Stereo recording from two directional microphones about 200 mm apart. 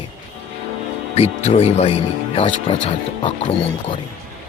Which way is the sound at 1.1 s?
30° left (ahead or behind).